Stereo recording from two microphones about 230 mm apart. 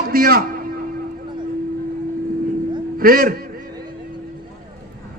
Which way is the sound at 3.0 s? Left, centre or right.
Right.